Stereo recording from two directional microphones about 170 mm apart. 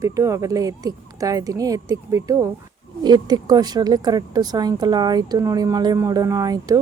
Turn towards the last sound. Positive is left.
turn(degrees=-20)  # may be behind; listen again after turning